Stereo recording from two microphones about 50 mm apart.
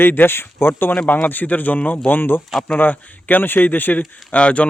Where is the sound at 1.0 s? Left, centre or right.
Left.